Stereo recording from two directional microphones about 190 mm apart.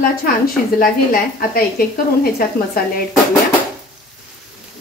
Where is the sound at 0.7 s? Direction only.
50° left (ahead or behind).